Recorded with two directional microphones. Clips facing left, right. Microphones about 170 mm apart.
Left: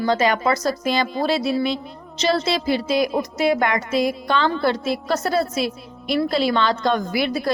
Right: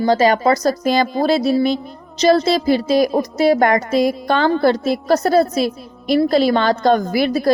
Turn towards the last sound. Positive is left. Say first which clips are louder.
# right 5 dB
turn(degrees=-40)  # may be behind; listen again after turning